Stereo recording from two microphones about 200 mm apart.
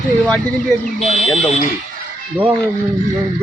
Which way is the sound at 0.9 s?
Centre (ahead or behind).